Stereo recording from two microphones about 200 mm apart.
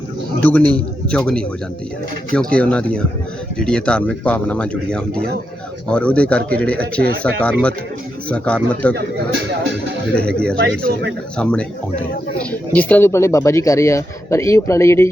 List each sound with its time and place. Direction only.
0.4 s speech: 10° left (ahead or behind)
9.0 s a man's voice: 60° right (ahead or behind)
10.2 s speech: 5° left (ahead or behind)